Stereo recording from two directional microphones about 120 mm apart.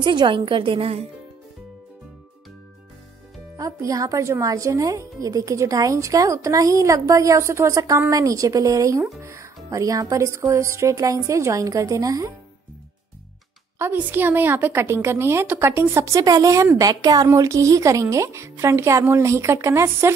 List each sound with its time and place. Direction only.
0.0 s a woman's voice: 40° right (ahead or behind)
3.5 s a woman's voice: 30° right (ahead or behind)
13.7 s a woman's voice: 15° right (ahead or behind)